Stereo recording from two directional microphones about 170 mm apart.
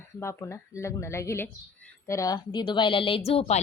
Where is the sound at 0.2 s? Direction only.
15° left (ahead or behind).